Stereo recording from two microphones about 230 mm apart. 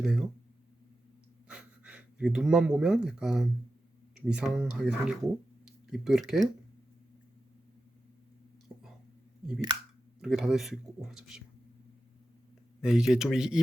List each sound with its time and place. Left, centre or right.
0.0 s speech: centre
1.5 s speech: centre
8.7 s a sound: centre
9.4 s speech: centre
12.8 s speech: centre